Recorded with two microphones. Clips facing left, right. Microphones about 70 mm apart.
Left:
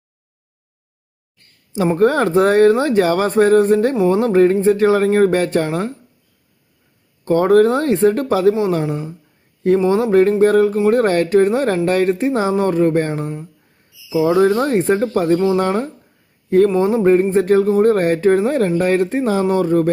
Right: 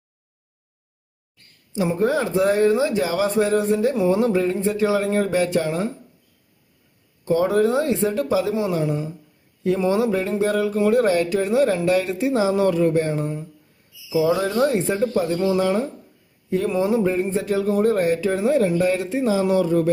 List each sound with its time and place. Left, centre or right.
2.0 s speech: left
7.3 s speech: left
8.8 s a woman's voice: left
10.1 s speech: left
16.6 s a woman's voice: left
17.0 s speech: left